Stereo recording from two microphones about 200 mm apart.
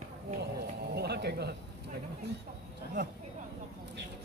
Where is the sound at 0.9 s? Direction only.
55° right (ahead or behind).